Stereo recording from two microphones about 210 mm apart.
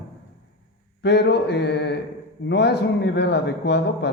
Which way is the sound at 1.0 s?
55° left (ahead or behind).